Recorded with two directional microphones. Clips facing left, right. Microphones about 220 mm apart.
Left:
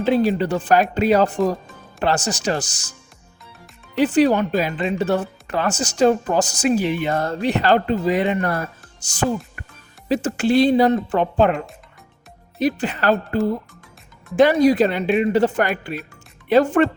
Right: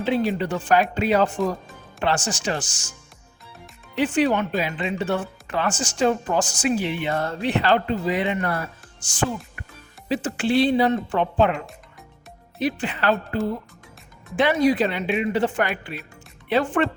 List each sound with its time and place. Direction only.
0.0 s speech: 40° left (ahead or behind)
3.9 s speech: 40° left (ahead or behind)